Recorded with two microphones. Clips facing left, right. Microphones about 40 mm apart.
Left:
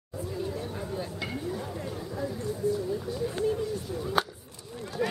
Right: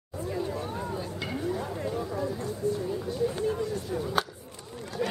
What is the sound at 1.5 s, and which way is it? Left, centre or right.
Speech, centre.